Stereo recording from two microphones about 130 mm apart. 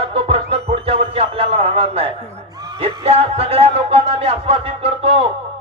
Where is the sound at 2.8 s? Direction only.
50° right (ahead or behind).